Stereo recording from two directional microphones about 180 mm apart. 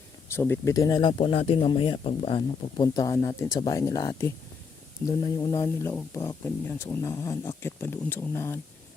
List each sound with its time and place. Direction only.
0.3 s speech: 15° left (ahead or behind)